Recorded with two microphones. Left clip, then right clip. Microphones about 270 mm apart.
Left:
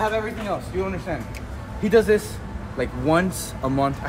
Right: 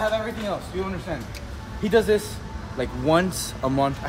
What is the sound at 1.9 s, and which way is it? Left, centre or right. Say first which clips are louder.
A man's voice: left 2 dB; centre.